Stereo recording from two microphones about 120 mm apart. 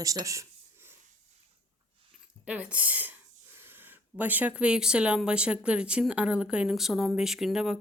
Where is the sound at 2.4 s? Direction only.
10° right (ahead or behind).